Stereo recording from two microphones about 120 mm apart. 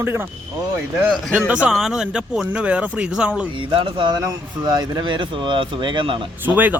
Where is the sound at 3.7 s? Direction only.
45° right (ahead or behind).